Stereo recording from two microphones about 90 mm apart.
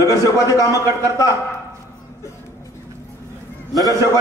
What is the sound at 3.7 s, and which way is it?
Speech, 40° left (ahead or behind).